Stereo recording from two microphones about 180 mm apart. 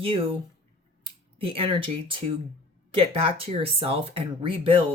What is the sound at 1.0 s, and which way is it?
Speech, 30° right (ahead or behind).